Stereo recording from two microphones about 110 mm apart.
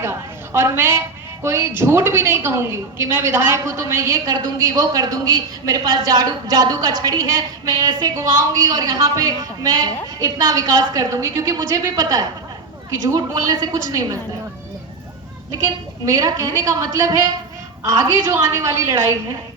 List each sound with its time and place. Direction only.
0.0 s a woman's voice: 20° right (ahead or behind)
16.0 s a woman's voice: 30° right (ahead or behind)